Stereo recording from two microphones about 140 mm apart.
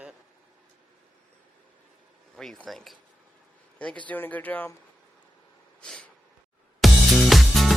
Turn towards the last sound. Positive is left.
turn(degrees=0)  # may be behind; listen again after turning